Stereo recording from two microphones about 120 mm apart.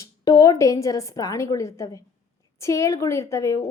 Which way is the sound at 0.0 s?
30° left (ahead or behind).